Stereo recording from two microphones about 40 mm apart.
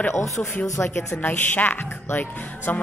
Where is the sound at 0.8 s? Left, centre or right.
Left.